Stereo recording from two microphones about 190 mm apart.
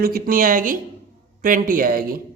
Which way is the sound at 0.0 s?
50° right (ahead or behind).